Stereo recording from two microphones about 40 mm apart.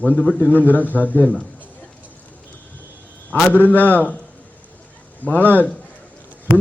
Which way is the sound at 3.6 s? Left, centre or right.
Left.